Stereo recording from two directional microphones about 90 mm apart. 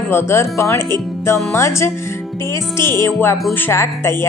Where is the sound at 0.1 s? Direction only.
25° left (ahead or behind).